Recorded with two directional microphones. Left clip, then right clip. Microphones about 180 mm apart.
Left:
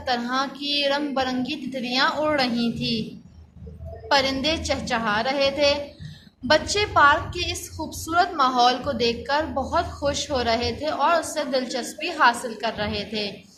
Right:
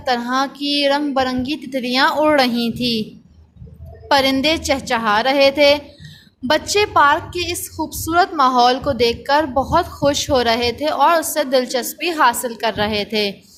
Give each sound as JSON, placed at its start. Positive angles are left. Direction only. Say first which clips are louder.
{"t": 0.0, "sound": "a woman's voice", "louder": "right 6 dB", "side_deg": -55}
{"t": 4.1, "sound": "a woman's voice", "louder": "right 6 dB", "side_deg": -60}